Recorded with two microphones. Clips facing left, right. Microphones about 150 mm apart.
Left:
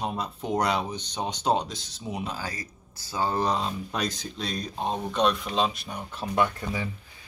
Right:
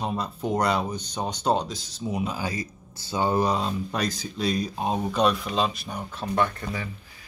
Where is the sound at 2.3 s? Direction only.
20° right (ahead or behind).